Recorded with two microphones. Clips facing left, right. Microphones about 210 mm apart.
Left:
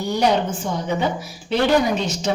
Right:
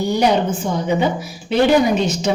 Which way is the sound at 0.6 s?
15° right (ahead or behind).